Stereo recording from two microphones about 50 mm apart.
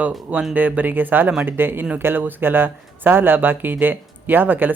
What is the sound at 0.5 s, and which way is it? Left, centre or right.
Speech, right.